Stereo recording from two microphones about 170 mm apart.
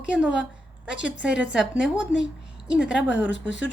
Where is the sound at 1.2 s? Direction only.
5° right (ahead or behind).